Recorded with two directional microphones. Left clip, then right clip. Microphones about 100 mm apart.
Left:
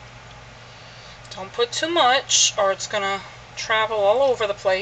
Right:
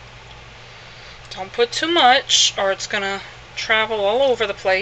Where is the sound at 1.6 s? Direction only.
25° right (ahead or behind).